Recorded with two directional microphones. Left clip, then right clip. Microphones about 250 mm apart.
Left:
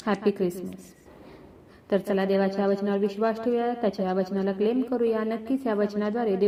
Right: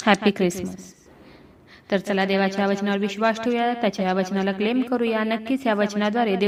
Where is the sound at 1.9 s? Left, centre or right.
Right.